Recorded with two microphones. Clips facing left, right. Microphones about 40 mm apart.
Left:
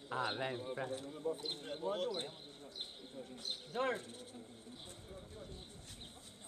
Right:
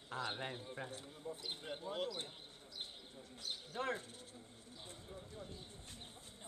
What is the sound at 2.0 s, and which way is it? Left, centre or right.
Speech, left.